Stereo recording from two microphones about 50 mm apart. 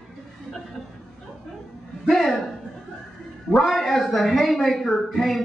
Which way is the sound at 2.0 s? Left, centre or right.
Centre.